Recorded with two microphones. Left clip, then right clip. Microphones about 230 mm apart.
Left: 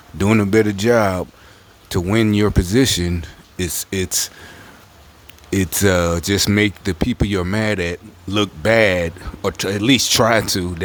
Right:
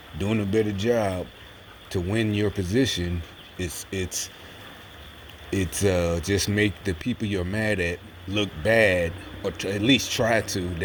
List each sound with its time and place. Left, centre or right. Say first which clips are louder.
0.2 s speech: left 9 dB; left
5.5 s speech: left 7 dB; left